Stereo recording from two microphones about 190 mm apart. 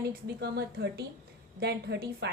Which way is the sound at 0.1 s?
55° right (ahead or behind).